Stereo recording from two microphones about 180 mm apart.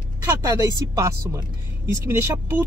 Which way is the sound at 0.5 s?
20° right (ahead or behind).